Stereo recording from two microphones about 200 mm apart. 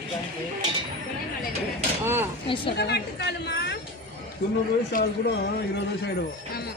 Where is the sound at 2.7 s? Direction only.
55° left (ahead or behind).